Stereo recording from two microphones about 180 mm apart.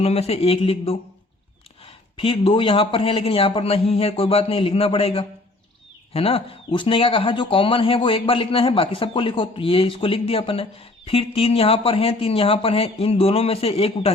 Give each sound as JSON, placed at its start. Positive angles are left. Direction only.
{"t": 0.0, "sound": "speech", "side_deg": 35}